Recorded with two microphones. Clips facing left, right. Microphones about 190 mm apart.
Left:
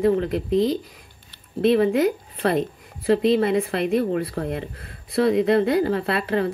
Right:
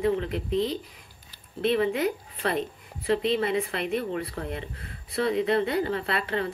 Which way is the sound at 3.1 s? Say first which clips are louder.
Left 6 dB; 45° left (ahead or behind).